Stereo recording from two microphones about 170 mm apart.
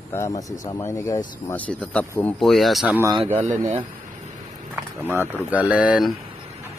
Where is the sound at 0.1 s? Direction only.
20° left (ahead or behind); by 3.0 s centre (ahead or behind).